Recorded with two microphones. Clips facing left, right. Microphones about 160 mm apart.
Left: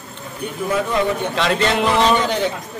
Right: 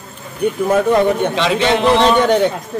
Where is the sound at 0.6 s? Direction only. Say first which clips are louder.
Right 6 dB; 50° right (ahead or behind).